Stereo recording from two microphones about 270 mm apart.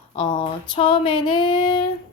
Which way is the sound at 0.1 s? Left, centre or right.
Left.